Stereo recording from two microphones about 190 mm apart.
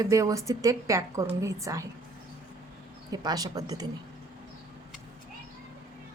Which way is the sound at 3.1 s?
20° right (ahead or behind).